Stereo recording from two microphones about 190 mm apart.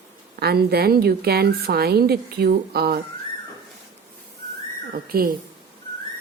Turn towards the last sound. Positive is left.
turn(degrees=-50)  # may be behind; listen again after turning